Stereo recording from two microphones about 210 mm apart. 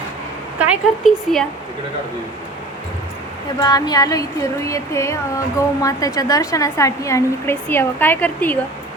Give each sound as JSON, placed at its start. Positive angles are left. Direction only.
{"t": 0.6, "sound": "speech", "side_deg": -5}
{"t": 3.6, "sound": "speech", "side_deg": 15}